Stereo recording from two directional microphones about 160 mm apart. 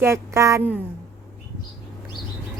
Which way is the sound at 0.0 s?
20° right (ahead or behind).